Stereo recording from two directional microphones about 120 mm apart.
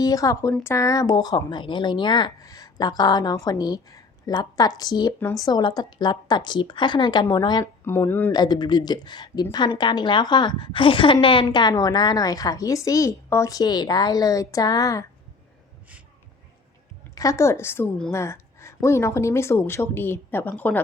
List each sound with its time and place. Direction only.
0.0 s speech: 30° left (ahead or behind)
7.6 s speech: 20° left (ahead or behind)
8.3 s speech: 35° left (ahead or behind)
17.2 s speech: 25° left (ahead or behind)